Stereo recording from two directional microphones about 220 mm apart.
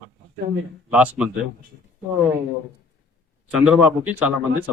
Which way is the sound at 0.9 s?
5° right (ahead or behind).